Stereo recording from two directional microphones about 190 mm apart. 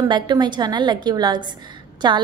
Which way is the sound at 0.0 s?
20° right (ahead or behind).